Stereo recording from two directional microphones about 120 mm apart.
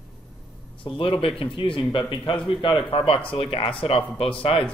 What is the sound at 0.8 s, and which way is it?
Speech, 50° left (ahead or behind).